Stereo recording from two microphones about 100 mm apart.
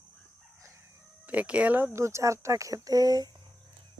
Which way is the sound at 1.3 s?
15° right (ahead or behind).